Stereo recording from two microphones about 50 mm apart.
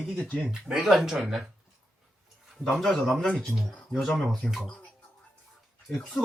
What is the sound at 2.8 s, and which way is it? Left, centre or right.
Speech, centre.